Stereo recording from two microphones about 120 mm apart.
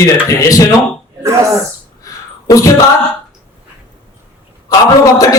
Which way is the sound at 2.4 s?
30° left (ahead or behind).